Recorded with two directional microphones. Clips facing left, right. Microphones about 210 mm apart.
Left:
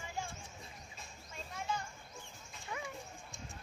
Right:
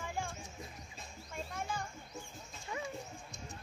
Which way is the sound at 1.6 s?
50° right (ahead or behind).